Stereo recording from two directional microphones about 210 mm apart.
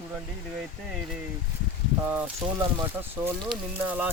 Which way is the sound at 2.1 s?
15° right (ahead or behind).